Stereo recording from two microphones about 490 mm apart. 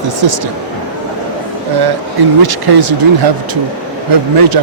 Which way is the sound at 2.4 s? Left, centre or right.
Right.